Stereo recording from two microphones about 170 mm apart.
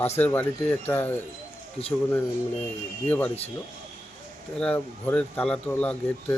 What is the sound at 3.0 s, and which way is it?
Speech, 10° left (ahead or behind).